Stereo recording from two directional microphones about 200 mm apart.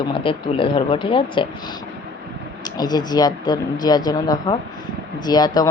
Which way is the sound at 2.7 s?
20° left (ahead or behind).